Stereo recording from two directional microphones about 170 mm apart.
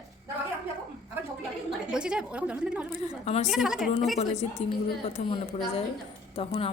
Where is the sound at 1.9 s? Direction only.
5° right (ahead or behind).